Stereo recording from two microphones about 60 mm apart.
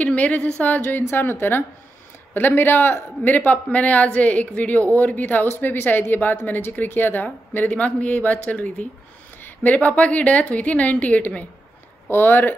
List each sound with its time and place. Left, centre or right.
0.0 s a woman's voice: left
12.1 s speech: left